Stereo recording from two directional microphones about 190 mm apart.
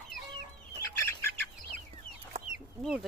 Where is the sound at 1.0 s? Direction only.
10° left (ahead or behind).